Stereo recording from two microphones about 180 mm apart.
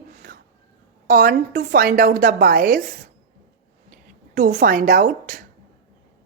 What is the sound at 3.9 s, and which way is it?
Speech, 55° right (ahead or behind).